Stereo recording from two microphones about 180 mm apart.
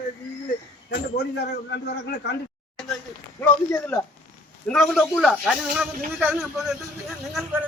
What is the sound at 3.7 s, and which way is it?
A man's voice, 10° left (ahead or behind).